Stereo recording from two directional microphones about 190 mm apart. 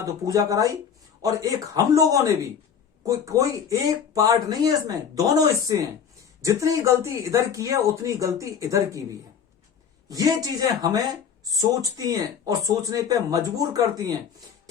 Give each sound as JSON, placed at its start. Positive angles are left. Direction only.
{"t": 0.0, "sound": "speech", "side_deg": -20}
{"t": 10.1, "sound": "speech", "side_deg": -20}